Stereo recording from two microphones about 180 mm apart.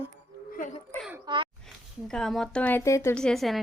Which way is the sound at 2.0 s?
5° left (ahead or behind).